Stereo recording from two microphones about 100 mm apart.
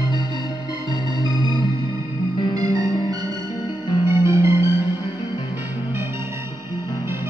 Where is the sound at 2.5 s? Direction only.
40° right (ahead or behind).